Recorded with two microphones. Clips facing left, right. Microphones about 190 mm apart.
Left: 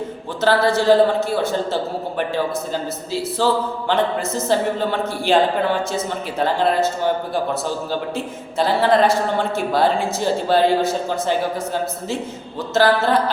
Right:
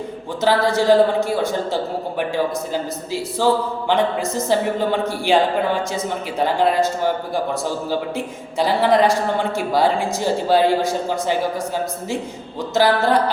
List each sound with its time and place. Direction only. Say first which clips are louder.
0.4 s speech: left 1 dB; 15° right (ahead or behind)
12.7 s speech: even; 15° right (ahead or behind)